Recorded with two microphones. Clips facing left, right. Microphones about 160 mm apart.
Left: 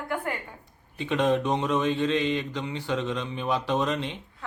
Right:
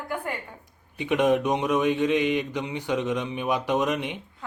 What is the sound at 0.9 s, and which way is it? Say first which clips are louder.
Speech: right 2 dB; 15° right (ahead or behind).